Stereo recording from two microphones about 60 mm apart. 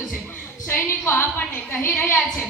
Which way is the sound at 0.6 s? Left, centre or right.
Left.